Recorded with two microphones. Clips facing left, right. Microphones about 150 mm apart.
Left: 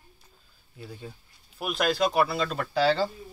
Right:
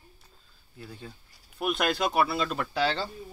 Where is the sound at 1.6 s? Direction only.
Centre (ahead or behind).